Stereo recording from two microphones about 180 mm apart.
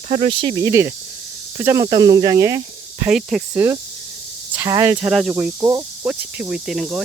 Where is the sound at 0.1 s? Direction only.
30° right (ahead or behind).